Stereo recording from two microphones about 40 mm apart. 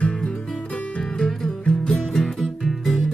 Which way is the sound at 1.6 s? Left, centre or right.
Left.